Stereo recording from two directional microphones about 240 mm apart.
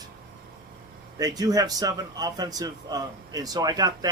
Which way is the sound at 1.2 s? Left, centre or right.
Centre.